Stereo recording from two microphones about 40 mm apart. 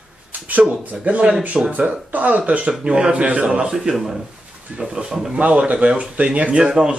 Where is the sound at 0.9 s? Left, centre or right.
Right.